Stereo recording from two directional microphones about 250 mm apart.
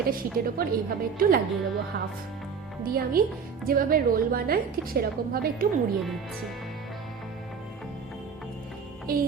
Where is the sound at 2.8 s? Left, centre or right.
Right.